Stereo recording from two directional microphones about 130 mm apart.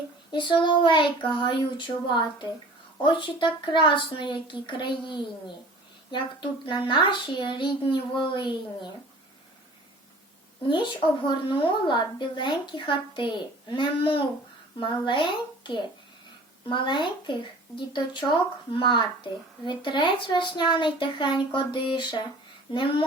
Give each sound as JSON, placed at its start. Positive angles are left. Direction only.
{"t": 0.3, "sound": "a child's voice", "side_deg": 40}
{"t": 10.7, "sound": "a child's voice", "side_deg": 40}